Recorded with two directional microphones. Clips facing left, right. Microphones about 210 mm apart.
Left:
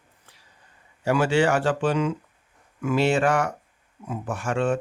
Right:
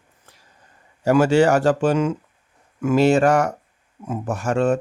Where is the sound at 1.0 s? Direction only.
45° right (ahead or behind).